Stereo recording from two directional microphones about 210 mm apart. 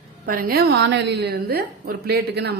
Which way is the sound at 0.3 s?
45° right (ahead or behind).